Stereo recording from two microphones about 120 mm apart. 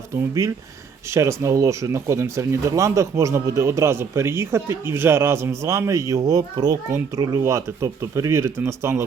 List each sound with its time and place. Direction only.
0.4 s speech: 25° right (ahead or behind)